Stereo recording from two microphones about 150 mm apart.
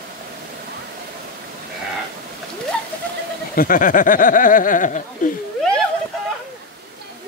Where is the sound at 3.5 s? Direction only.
70° left (ahead or behind).